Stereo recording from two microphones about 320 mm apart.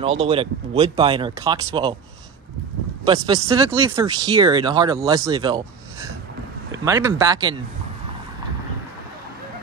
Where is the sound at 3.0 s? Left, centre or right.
Centre.